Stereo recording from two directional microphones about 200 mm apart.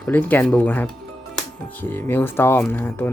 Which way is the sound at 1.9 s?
10° left (ahead or behind).